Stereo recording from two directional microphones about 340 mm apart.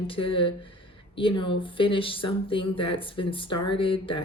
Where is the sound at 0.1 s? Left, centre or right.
Centre.